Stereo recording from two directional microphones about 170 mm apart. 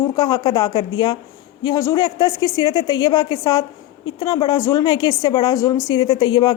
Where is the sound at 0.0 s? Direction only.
25° left (ahead or behind).